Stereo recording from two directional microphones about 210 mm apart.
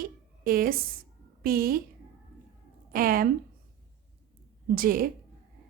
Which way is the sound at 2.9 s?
45° right (ahead or behind).